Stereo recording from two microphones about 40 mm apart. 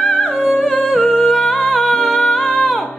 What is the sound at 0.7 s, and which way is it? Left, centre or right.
Humming, left.